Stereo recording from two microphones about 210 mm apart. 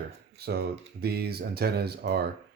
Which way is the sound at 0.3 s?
50° right (ahead or behind).